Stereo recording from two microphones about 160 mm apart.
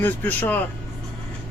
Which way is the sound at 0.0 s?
10° left (ahead or behind).